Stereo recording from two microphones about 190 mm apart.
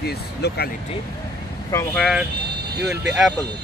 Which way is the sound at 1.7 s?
5° left (ahead or behind).